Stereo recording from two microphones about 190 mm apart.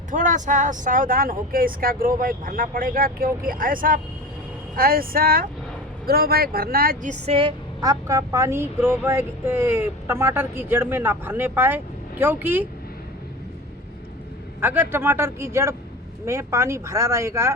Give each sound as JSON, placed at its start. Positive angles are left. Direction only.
{"t": 0.1, "sound": "speech", "side_deg": -40}
{"t": 14.6, "sound": "speech", "side_deg": -10}